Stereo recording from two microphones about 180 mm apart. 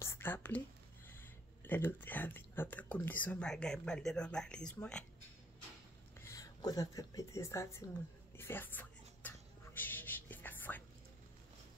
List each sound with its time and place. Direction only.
0.0 s whispering: 15° left (ahead or behind)
1.6 s speech: 10° left (ahead or behind)
6.2 s speech: 20° left (ahead or behind)
8.4 s a sound: 10° left (ahead or behind)
9.8 s whispering: 10° left (ahead or behind)